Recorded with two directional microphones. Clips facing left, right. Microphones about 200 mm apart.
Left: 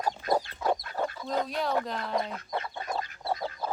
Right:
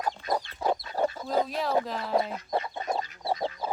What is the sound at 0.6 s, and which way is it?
Chicken, 35° right (ahead or behind).